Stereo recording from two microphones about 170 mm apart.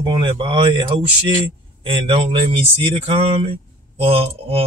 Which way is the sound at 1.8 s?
35° right (ahead or behind).